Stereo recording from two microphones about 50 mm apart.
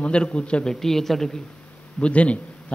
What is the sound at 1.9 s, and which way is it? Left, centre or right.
Speech, left.